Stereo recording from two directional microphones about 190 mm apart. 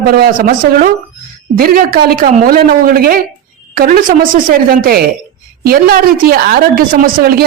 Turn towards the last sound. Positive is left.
turn(degrees=-50)  # may be behind; listen again after turning